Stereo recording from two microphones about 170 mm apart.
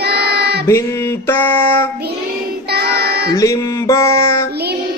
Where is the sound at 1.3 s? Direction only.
15° left (ahead or behind).